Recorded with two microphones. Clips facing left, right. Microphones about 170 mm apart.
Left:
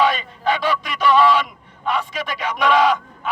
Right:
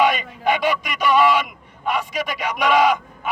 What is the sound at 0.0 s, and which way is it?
A man's voice, 15° right (ahead or behind).